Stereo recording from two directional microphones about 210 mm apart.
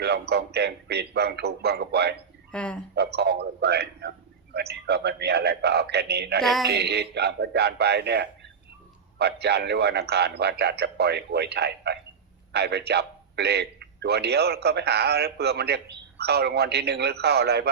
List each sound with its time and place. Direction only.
0.0 s a man's voice: 50° right (ahead or behind)
2.5 s speech: 5° left (ahead or behind)
2.9 s a man's voice: 50° right (ahead or behind)
6.4 s a sound: centre (ahead or behind)
6.7 s a man's voice: 50° right (ahead or behind)